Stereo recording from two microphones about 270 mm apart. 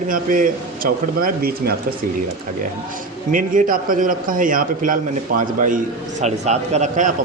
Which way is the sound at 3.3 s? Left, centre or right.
Right.